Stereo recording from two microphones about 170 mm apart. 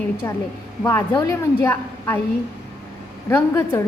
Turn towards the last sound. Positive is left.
turn(degrees=15)  # may be behind; listen again after turning